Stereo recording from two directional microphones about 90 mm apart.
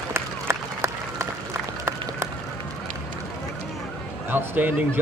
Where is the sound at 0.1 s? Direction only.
30° right (ahead or behind).